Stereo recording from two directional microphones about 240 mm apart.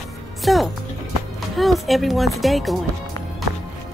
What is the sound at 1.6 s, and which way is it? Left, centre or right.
Speech, centre.